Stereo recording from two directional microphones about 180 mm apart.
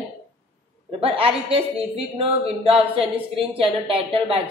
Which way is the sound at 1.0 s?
30° right (ahead or behind).